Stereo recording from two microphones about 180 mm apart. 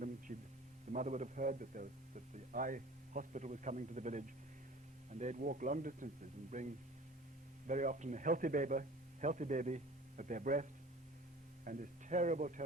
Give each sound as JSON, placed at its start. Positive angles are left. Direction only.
{"t": 0.3, "sound": "a sound", "side_deg": -45}
{"t": 0.9, "sound": "a man's voice", "side_deg": -40}
{"t": 7.7, "sound": "a man's voice", "side_deg": -45}